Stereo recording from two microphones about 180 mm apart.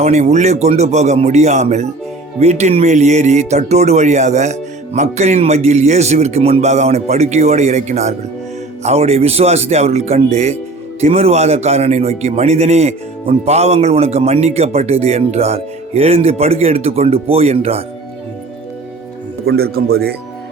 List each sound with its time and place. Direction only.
0.0 s a man's voice: 40° right (ahead or behind)
19.5 s speech: 60° right (ahead or behind)